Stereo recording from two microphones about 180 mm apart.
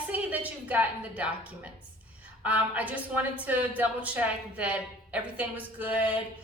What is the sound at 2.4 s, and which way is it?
A woman's voice, 10° right (ahead or behind).